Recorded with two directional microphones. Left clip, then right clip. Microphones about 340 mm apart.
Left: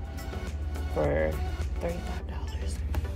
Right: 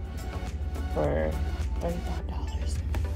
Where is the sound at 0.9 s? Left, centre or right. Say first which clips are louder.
Left 1 dB; centre.